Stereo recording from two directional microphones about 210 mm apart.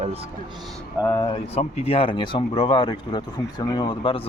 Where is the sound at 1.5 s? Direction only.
30° left (ahead or behind).